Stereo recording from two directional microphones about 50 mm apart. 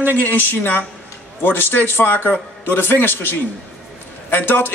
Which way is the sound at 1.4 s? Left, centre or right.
Left.